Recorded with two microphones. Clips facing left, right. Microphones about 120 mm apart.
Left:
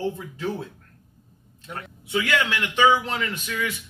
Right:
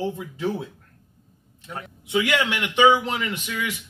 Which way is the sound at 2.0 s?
15° right (ahead or behind).